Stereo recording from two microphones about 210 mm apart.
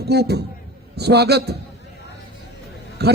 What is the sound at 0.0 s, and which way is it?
A man's voice, 50° right (ahead or behind).